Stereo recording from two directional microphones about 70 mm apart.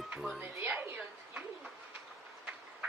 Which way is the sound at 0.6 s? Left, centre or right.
Right.